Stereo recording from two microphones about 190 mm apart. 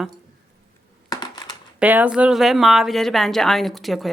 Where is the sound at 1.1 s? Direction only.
20° left (ahead or behind).